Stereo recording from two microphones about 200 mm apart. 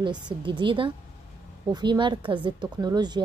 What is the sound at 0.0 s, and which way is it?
A woman's voice, 25° right (ahead or behind).